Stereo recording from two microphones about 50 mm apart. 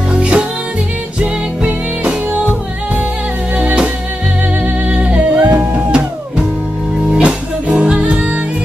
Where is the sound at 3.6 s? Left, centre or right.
Right.